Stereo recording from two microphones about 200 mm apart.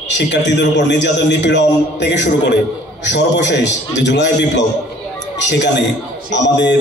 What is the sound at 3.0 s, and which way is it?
A man's voice, 60° left (ahead or behind).